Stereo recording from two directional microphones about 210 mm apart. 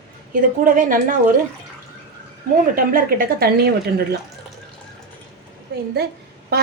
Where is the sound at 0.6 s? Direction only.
40° right (ahead or behind).